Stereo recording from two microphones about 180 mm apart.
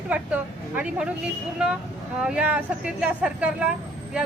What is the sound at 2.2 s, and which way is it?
Speech, 5° right (ahead or behind).